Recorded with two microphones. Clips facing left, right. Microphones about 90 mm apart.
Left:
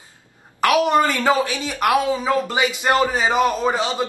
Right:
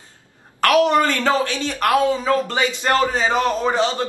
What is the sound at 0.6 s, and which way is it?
A woman's voice, 15° left (ahead or behind).